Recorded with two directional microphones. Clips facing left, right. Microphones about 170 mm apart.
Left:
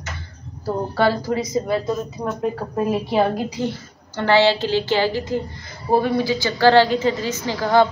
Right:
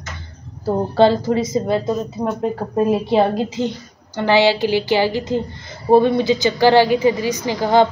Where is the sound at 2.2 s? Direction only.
5° right (ahead or behind).